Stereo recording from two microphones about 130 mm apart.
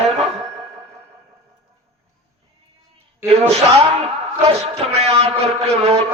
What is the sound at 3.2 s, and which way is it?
A man's voice, 50° right (ahead or behind).